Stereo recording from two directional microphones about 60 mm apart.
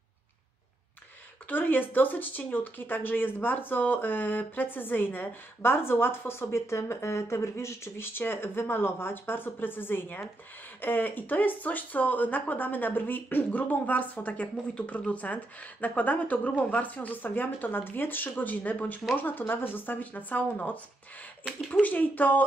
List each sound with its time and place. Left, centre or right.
1.5 s speech: left
21.8 s speech: left